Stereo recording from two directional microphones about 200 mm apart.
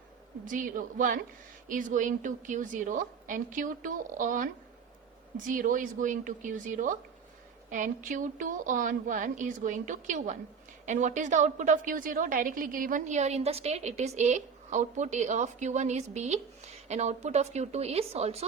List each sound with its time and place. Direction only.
0.4 s a woman's voice: 40° right (ahead or behind)
5.5 s a woman's voice: 40° right (ahead or behind)